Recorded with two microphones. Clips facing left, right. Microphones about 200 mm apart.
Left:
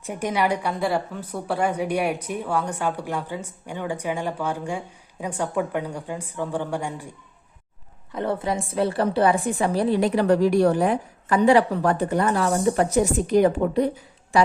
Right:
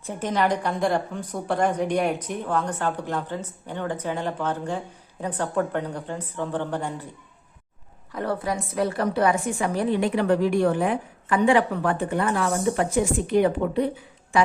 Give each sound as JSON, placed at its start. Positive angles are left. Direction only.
{"t": 0.0, "sound": "a woman's voice", "side_deg": 15}
{"t": 8.1, "sound": "a woman's voice", "side_deg": 25}